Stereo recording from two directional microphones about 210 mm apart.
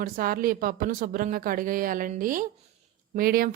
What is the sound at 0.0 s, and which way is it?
A woman's voice, 45° right (ahead or behind).